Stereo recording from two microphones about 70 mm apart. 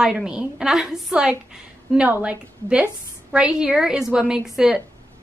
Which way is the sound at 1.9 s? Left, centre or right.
Centre.